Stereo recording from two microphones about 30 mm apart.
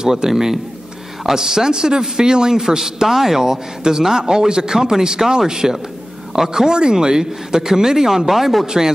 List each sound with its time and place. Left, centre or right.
0.0 s speech: centre
3.1 s speech: centre
6.7 s speech: right; by 8.6 s centre
8.6 s speech: centre